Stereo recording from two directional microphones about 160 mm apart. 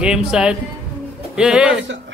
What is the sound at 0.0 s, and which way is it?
Speech, 5° right (ahead or behind).